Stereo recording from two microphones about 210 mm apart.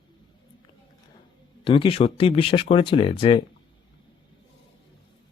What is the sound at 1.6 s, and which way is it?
Speech, 25° left (ahead or behind).